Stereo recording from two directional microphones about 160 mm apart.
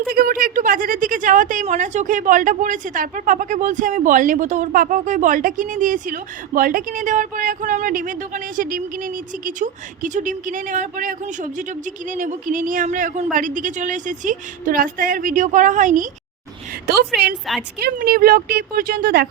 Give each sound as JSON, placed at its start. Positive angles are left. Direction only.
{"t": 0.1, "sound": "a woman's voice", "side_deg": -70}
{"t": 12.1, "sound": "a woman's voice", "side_deg": -55}
{"t": 16.8, "sound": "a woman's voice", "side_deg": -85}